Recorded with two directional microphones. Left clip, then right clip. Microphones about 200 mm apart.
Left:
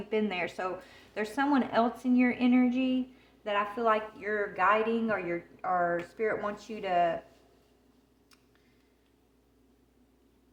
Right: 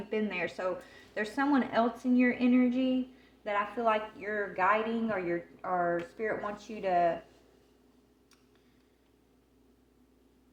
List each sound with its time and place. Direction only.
0.1 s speech: 20° left (ahead or behind)